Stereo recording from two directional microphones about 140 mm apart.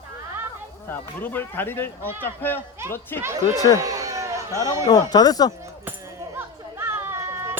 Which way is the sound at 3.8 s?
25° right (ahead or behind).